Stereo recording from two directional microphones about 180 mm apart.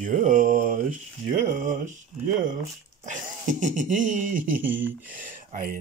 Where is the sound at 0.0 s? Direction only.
45° right (ahead or behind).